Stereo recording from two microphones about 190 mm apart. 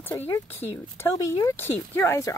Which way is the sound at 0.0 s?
15° left (ahead or behind).